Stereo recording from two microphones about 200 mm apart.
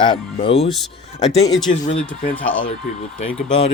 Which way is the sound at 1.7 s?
40° left (ahead or behind).